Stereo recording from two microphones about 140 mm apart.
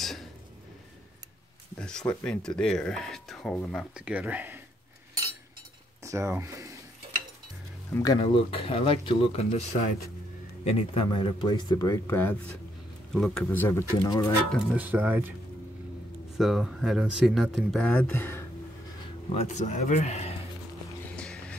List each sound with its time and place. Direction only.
0.0 s a sound: centre (ahead or behind)
1.8 s speech: 5° left (ahead or behind); by 4.6 s 10° right (ahead or behind)
6.0 s speech: 20° right (ahead or behind)
7.9 s speech: 25° left (ahead or behind)
8.2 s a man's voice: 40° left (ahead or behind)
12.1 s speech: 15° left (ahead or behind)
14.6 s speech: 10° right (ahead or behind)
16.3 s speech: centre (ahead or behind); by 18.4 s 15° left (ahead or behind)
19.3 s speech: 55° left (ahead or behind)
21.2 s music: 5° left (ahead or behind)